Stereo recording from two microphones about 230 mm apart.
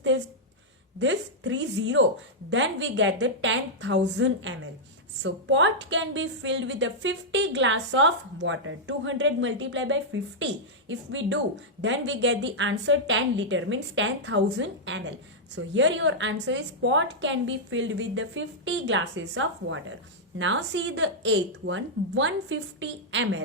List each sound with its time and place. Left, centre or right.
0.9 s a woman's voice: right